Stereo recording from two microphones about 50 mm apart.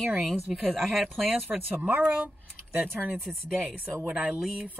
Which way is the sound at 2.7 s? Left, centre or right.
Right.